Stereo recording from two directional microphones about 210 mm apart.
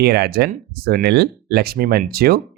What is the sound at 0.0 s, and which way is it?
Speech, 50° right (ahead or behind).